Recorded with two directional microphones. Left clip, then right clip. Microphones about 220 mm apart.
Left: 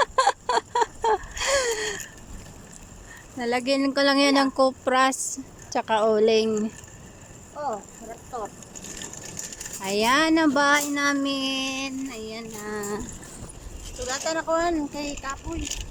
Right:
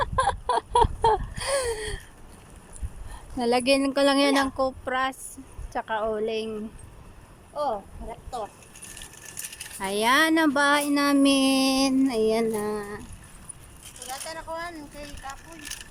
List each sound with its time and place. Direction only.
0.0 s a sound: 10° left (ahead or behind)
3.3 s speech: 5° right (ahead or behind); by 6.6 s 15° left (ahead or behind)
8.3 s speech: centre (ahead or behind)
9.0 s a sound: 30° left (ahead or behind)
9.8 s speech: 5° left (ahead or behind); by 12.6 s 30° right (ahead or behind)
14.1 s speech: 55° left (ahead or behind)
15.6 s vehicle: 15° left (ahead or behind)